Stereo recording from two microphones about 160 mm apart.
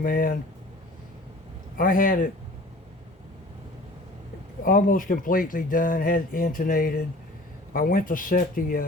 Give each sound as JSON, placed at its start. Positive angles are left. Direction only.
{"t": 0.0, "sound": "speech", "side_deg": 60}
{"t": 1.8, "sound": "speech", "side_deg": 60}
{"t": 4.6, "sound": "speech", "side_deg": 60}